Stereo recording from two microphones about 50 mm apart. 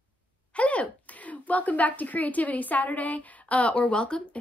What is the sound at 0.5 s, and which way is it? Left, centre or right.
Speech, left.